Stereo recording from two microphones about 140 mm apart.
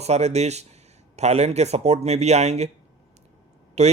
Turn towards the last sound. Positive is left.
turn(degrees=-50)  # may be behind; listen again after turning